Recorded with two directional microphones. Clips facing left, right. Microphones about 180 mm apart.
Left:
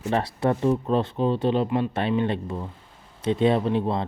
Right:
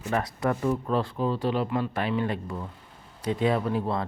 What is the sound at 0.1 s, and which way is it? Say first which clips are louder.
Speech: left 3 dB; 30° left (ahead or behind).